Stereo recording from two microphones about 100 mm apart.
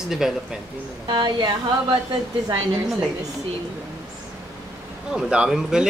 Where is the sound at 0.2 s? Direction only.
5° right (ahead or behind).